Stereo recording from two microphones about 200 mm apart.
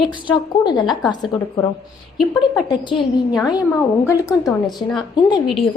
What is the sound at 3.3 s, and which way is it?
A woman's voice, 20° left (ahead or behind).